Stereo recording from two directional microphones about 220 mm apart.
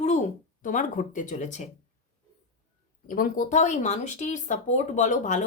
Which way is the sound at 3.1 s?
40° left (ahead or behind).